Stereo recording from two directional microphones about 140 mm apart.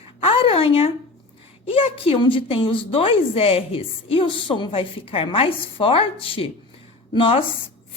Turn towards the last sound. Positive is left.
turn(degrees=40)  # may be behind; listen again after turning